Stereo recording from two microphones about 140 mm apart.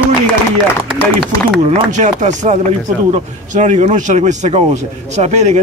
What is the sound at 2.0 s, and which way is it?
A man's voice, 60° right (ahead or behind).